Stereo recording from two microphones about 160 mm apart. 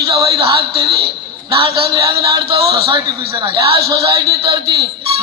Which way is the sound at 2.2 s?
35° right (ahead or behind).